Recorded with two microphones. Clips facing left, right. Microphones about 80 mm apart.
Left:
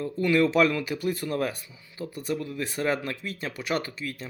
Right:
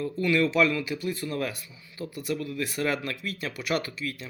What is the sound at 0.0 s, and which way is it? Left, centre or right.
Speech, left.